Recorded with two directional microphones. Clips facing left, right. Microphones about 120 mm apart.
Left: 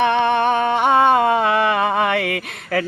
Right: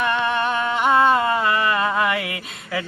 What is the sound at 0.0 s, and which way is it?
Humming, 70° left (ahead or behind).